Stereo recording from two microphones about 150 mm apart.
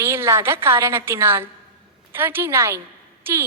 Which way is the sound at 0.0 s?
15° right (ahead or behind).